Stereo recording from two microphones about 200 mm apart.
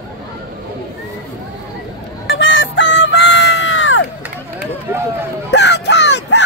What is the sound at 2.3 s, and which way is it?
Fowl, 75° left (ahead or behind).